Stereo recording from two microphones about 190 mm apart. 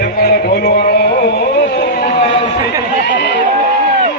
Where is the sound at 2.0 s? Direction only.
35° left (ahead or behind).